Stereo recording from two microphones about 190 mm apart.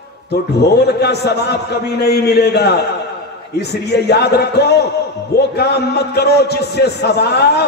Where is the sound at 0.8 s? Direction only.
60° left (ahead or behind).